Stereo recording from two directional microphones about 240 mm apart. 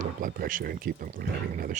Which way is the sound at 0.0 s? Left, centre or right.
Right.